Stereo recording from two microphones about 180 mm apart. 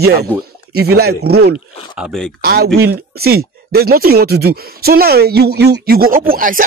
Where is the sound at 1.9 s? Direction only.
Centre (ahead or behind).